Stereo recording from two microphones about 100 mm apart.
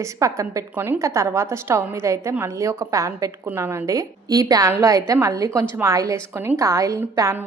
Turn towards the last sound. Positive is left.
turn(degrees=-30)  # may be behind; listen again after turning